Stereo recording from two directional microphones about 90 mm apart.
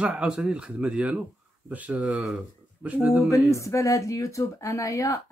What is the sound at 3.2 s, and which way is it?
Speech, 35° left (ahead or behind).